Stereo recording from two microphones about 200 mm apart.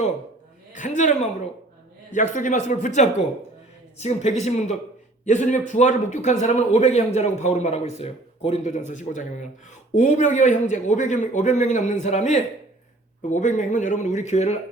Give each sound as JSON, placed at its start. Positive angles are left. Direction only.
{"t": 0.7, "sound": "a woman's voice", "side_deg": 40}